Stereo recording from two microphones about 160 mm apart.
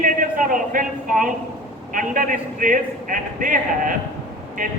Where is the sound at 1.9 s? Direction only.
55° right (ahead or behind).